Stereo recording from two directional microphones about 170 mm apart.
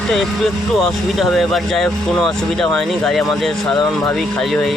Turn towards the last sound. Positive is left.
turn(degrees=5)  # may be behind; listen again after turning